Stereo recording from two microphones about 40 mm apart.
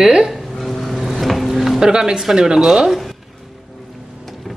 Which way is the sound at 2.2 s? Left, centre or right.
Centre.